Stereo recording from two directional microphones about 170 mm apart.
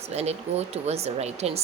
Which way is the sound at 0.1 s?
40° right (ahead or behind).